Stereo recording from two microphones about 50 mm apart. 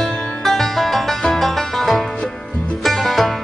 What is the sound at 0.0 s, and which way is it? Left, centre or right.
Music, centre.